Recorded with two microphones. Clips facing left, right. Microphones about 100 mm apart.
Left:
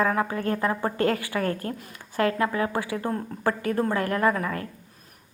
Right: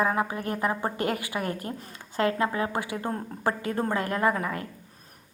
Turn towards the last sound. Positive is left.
turn(degrees=-25)  # may be behind; listen again after turning